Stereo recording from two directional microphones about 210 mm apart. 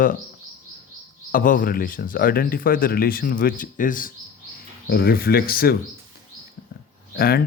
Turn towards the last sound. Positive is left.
turn(degrees=45)  # may be behind; listen again after turning